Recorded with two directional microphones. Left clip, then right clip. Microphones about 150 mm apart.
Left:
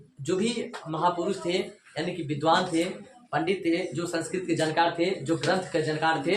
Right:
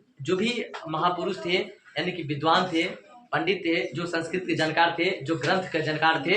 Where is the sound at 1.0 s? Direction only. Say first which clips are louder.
Even; 10° right (ahead or behind).